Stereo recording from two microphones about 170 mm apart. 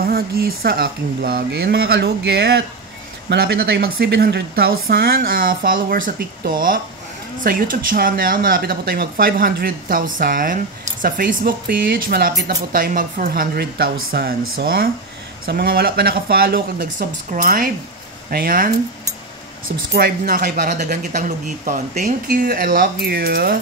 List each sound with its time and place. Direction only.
0.0 s speech: 65° right (ahead or behind)
20.0 s speech: 60° right (ahead or behind)